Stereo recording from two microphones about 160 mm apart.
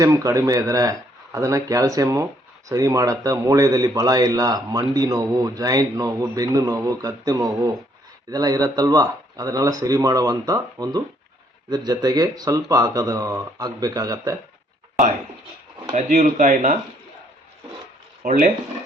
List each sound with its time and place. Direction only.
0.0 s speech: 20° right (ahead or behind)
16.0 s speech: 50° right (ahead or behind)
18.2 s speech: 50° right (ahead or behind)